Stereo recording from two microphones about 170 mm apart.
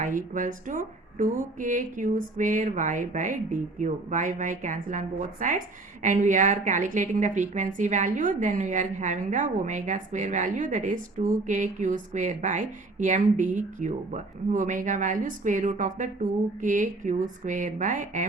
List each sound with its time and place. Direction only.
0.0 s speech: 50° right (ahead or behind)